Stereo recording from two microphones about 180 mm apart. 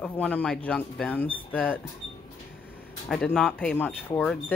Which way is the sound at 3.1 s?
5° left (ahead or behind).